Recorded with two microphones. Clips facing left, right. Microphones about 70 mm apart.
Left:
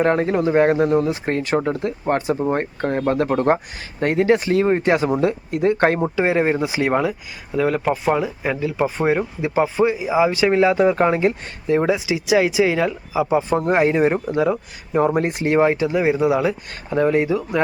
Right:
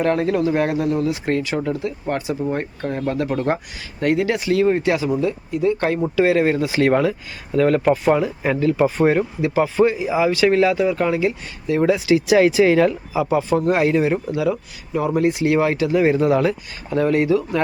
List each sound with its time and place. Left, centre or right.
0.0 s speech: left
4.9 s speech: left
6.0 s speech: left; by 9.2 s centre
9.4 s speech: left
10.8 s speech: left
11.8 s speech: centre
13.6 s speech: left
14.9 s speech: left
15.5 s speech: left